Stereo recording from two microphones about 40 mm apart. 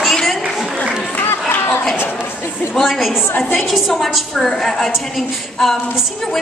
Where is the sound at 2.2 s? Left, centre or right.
Left.